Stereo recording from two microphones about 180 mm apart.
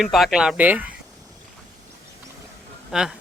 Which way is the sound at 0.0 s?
Centre (ahead or behind).